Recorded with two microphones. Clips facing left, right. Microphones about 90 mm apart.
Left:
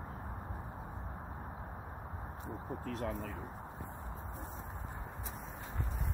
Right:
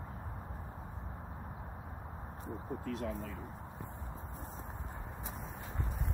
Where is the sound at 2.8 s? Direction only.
45° left (ahead or behind).